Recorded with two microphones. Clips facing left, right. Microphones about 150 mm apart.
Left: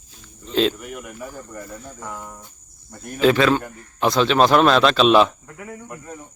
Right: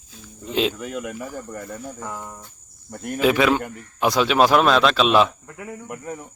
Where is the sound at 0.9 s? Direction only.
90° right.